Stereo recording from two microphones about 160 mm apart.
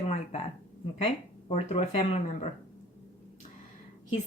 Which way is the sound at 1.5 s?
40° left (ahead or behind).